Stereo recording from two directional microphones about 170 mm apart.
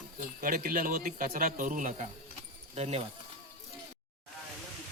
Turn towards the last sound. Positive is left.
turn(degrees=-40)  # may be behind; listen again after turning